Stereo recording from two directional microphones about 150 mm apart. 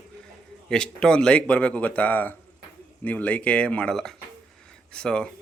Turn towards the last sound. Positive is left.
turn(degrees=5)  # may be behind; listen again after turning